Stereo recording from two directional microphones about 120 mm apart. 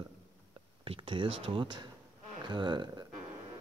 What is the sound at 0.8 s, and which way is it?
Speech, 50° right (ahead or behind).